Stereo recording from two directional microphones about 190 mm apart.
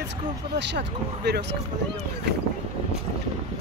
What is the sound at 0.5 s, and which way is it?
Speech, 65° right (ahead or behind).